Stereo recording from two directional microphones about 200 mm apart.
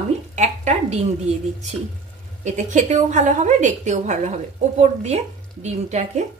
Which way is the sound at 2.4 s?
35° right (ahead or behind).